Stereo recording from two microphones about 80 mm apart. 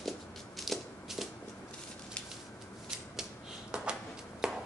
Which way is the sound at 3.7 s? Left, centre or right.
Centre.